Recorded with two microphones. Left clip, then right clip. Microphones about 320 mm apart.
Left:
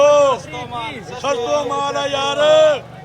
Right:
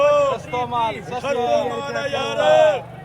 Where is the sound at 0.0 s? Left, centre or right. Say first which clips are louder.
Left 5 dB; centre.